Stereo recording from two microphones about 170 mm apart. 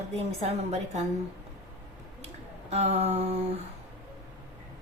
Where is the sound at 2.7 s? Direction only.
40° right (ahead or behind).